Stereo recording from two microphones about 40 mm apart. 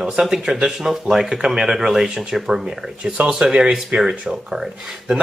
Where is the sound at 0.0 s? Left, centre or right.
Centre.